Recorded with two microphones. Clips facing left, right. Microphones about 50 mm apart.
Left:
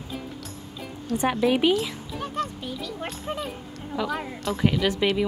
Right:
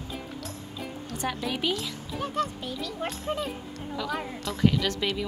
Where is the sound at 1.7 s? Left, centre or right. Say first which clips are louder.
Left 6 dB; centre.